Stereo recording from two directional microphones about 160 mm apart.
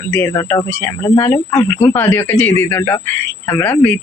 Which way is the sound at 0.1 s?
15° left (ahead or behind).